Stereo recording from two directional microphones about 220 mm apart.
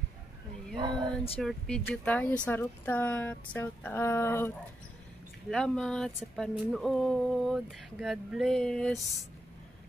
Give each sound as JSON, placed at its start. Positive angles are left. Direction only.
{"t": 0.7, "sound": "speech", "side_deg": -20}
{"t": 1.4, "sound": "speech", "side_deg": 0}
{"t": 5.5, "sound": "a sound", "side_deg": 5}